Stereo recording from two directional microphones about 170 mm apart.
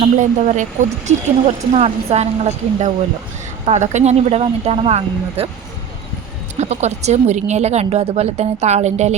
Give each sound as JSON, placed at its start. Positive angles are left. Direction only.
{"t": 0.2, "sound": "speech", "side_deg": -45}
{"t": 6.6, "sound": "speech", "side_deg": -40}